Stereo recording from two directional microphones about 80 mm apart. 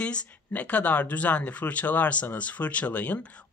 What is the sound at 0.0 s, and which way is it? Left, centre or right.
Speech, centre.